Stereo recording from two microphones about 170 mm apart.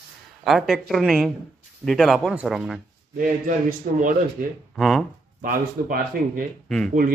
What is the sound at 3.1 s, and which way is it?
Speech, 55° right (ahead or behind).